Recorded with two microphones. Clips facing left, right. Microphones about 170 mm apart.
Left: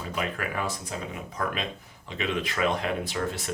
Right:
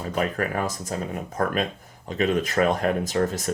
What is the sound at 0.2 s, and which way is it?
Speech, 40° right (ahead or behind).